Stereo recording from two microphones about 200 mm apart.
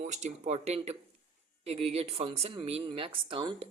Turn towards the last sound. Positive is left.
turn(degrees=-25)  # may be behind; listen again after turning